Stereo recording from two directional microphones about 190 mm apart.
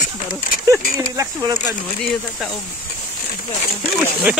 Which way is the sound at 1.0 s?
15° right (ahead or behind).